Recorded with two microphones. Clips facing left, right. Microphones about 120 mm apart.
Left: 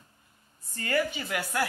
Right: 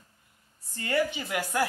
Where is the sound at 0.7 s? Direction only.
20° right (ahead or behind).